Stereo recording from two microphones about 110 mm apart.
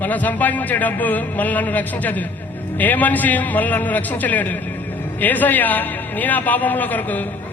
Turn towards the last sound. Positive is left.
turn(degrees=15)  # may be behind; listen again after turning